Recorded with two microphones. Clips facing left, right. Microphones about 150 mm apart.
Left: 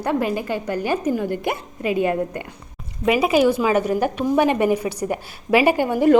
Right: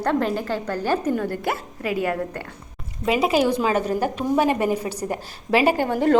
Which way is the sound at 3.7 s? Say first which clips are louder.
Left 3 dB; 15° left (ahead or behind).